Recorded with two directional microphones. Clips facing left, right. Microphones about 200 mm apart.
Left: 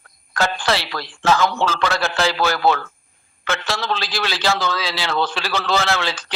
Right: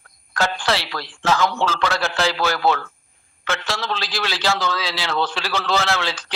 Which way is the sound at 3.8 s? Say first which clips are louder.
Left 2 dB; centre (ahead or behind).